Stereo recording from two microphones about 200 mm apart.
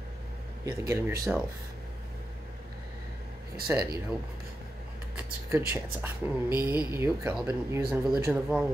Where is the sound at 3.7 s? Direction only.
15° right (ahead or behind).